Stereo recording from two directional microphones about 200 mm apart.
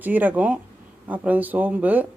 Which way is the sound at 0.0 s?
10° right (ahead or behind).